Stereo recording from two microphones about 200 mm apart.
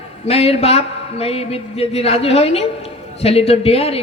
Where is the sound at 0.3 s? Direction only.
30° left (ahead or behind).